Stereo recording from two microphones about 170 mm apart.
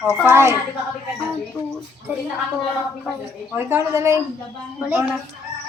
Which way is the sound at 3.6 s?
15° right (ahead or behind).